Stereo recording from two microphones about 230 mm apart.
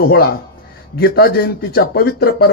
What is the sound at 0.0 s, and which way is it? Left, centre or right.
Speech, left.